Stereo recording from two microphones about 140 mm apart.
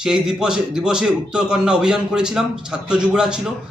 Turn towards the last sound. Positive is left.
turn(degrees=-5)  # may be behind; listen again after turning